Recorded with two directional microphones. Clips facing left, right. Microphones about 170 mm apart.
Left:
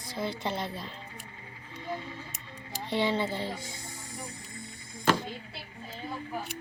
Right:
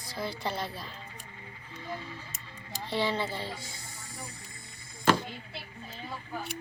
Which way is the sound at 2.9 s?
20° left (ahead or behind).